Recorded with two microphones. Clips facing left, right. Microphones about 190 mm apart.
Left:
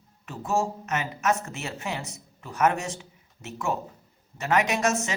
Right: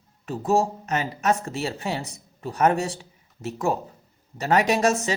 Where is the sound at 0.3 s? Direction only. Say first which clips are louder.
Right 5 dB; 35° right (ahead or behind).